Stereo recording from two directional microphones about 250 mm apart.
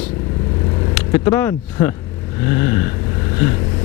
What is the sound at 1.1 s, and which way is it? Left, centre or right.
Speech, centre.